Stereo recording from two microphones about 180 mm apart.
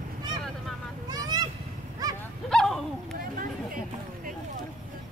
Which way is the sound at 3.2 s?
50° right (ahead or behind).